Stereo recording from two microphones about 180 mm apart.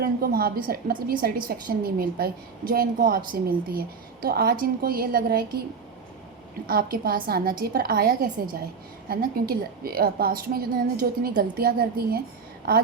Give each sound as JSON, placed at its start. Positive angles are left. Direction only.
{"t": 0.0, "sound": "a woman's voice", "side_deg": -55}
{"t": 6.7, "sound": "a woman's voice", "side_deg": -55}